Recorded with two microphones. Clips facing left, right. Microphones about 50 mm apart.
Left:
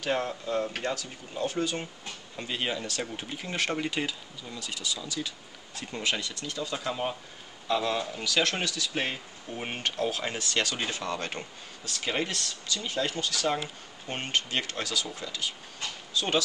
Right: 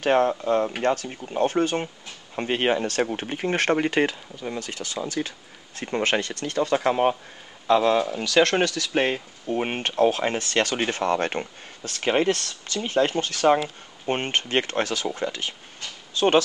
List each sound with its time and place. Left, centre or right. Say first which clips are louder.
0.0 s speech: right 9 dB; right